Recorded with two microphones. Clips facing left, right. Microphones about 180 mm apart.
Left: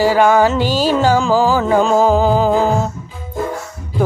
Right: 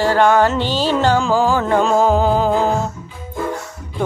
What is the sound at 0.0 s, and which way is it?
Music, 10° left (ahead or behind).